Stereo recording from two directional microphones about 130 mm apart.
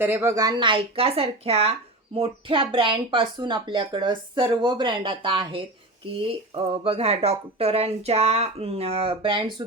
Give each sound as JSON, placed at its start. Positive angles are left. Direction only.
{"t": 0.0, "sound": "a woman's voice", "side_deg": -15}
{"t": 0.6, "sound": "speech", "side_deg": -45}